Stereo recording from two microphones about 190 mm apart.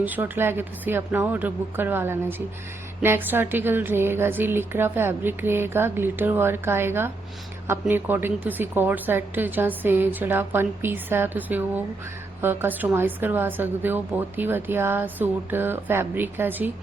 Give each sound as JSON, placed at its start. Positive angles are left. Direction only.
{"t": 0.0, "sound": "a woman's voice", "side_deg": -10}